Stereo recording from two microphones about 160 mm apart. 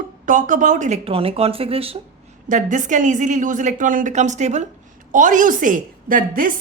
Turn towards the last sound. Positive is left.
turn(degrees=-60)  # may be behind; listen again after turning